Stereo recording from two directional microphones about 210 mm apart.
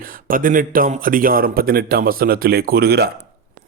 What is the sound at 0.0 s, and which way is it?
Speech, 40° right (ahead or behind).